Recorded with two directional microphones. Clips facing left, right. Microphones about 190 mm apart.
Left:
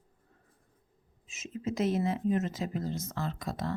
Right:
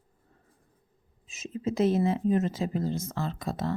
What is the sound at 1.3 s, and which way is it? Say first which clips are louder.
Speech: right 4 dB; 30° right (ahead or behind).